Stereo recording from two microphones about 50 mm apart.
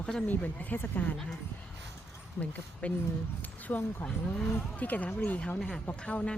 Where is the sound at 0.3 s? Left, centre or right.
Left.